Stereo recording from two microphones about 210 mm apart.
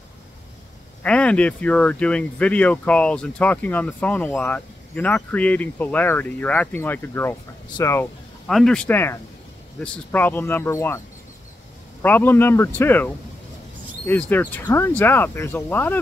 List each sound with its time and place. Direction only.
1.0 s speech: 5° left (ahead or behind)
8.5 s speech: centre (ahead or behind)
12.0 s speech: 10° left (ahead or behind)